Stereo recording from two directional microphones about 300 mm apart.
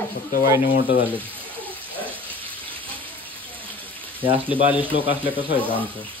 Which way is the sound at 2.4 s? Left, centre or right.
Centre.